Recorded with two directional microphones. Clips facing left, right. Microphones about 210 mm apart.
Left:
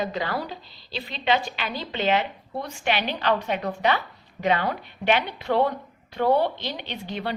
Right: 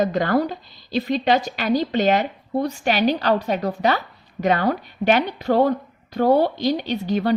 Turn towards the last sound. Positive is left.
turn(degrees=-40)  # may be behind; listen again after turning